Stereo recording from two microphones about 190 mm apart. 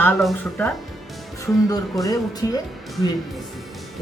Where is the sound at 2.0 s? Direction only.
20° left (ahead or behind).